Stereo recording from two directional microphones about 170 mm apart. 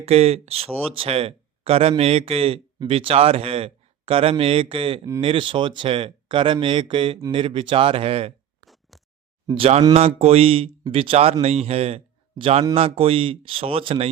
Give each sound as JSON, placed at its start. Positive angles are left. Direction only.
{"t": 0.0, "sound": "speech", "side_deg": -40}
{"t": 8.6, "sound": "a sound", "side_deg": 0}
{"t": 9.5, "sound": "speech", "side_deg": -35}